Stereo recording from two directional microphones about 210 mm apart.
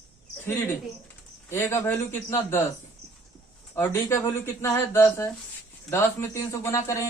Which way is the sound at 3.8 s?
10° left (ahead or behind).